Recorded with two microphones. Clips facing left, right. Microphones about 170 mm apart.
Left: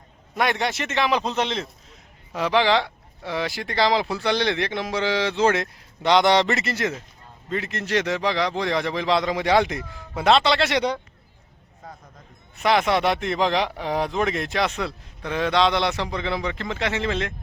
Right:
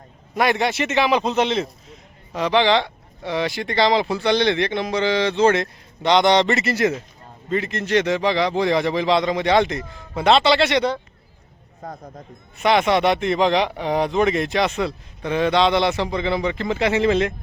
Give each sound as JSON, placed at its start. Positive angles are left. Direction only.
{"t": 0.3, "sound": "speech", "side_deg": 0}
{"t": 7.5, "sound": "speech", "side_deg": 0}
{"t": 11.8, "sound": "speech", "side_deg": -40}
{"t": 12.5, "sound": "speech", "side_deg": 0}